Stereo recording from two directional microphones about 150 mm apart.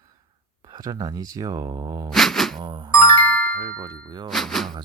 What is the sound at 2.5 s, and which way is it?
Speech, 30° right (ahead or behind).